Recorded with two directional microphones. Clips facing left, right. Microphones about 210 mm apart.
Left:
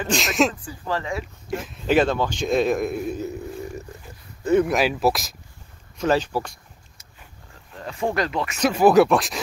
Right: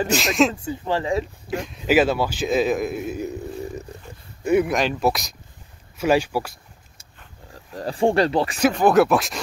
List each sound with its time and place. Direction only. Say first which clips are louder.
0.1 s speech: even; centre (ahead or behind)
0.6 s speech: right 4 dB; 25° right (ahead or behind)
1.5 s speech: right 1 dB; centre (ahead or behind)
3.2 s a sound: right 1 dB; 20° right (ahead or behind)
4.4 s speech: even; 10° right (ahead or behind)
4.6 s speech: left 1 dB; 5° left (ahead or behind)
5.9 s speech: right 2 dB; 10° right (ahead or behind)
7.7 s speech: right 6 dB; 35° right (ahead or behind)
8.7 s speech: left 3 dB; centre (ahead or behind)